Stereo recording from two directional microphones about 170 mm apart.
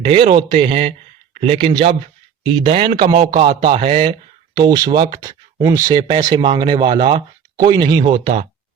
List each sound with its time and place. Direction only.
0.0 s speech: 35° right (ahead or behind)